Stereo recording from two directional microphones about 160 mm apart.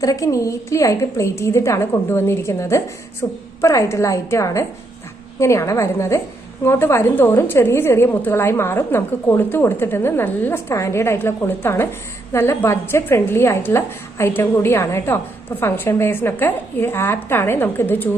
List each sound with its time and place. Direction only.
0.0 s a woman's voice: 20° left (ahead or behind)